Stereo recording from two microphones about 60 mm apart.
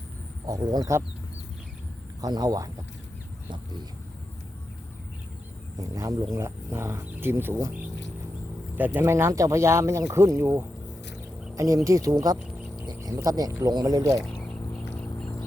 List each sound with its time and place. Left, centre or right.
0.4 s speech: right
2.2 s speech: right
5.8 s speech: right
6.3 s speech: right
8.7 s speech: right
9.0 s speech: right
11.5 s speech: right
14.4 s a sound: centre